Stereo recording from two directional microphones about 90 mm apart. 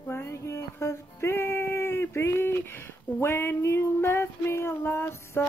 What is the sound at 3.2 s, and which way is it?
Female singing, 25° left (ahead or behind).